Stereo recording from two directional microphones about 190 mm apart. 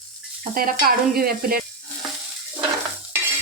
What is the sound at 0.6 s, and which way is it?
Speech, 50° right (ahead or behind).